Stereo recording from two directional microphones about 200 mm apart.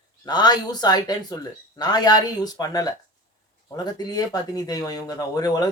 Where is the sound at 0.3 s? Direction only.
20° left (ahead or behind).